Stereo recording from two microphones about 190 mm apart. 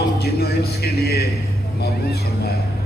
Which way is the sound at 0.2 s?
55° left (ahead or behind).